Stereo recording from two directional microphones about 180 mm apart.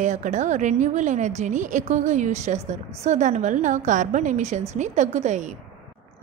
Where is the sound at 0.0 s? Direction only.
40° right (ahead or behind).